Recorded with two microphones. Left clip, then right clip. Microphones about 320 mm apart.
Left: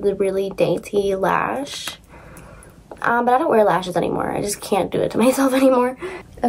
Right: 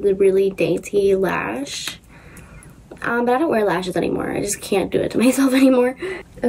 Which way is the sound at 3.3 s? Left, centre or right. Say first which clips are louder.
Left 3 dB; left.